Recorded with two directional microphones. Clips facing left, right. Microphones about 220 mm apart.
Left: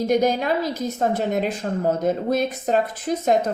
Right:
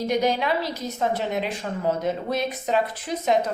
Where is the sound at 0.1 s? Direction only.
45° left (ahead or behind).